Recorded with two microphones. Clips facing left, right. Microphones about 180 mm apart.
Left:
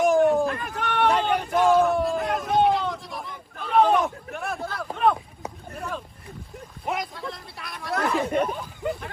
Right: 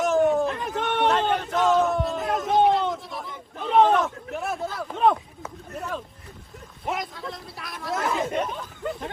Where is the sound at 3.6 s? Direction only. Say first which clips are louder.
Right 1 dB; 20° right (ahead or behind).